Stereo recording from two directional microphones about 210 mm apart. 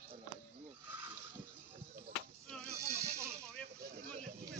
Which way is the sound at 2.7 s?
15° right (ahead or behind).